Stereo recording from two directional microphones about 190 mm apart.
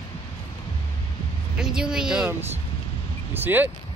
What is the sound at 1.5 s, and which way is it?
Speech, 5° right (ahead or behind).